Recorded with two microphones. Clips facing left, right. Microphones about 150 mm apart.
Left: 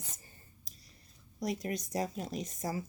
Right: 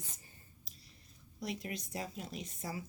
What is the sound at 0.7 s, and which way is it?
Whispering, 45° left (ahead or behind).